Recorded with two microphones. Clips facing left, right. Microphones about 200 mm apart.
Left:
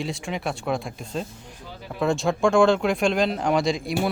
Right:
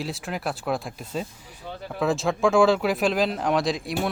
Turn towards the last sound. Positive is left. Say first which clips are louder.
# left 2 dB
turn(degrees=0)  # may be behind; listen again after turning